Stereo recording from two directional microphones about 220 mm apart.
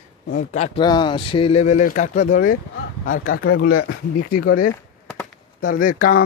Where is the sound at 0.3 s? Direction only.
35° left (ahead or behind).